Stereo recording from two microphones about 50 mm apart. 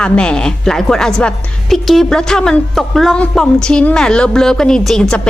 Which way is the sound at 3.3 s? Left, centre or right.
Centre.